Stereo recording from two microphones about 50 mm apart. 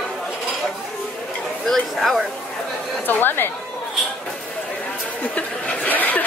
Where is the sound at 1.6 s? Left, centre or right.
Centre.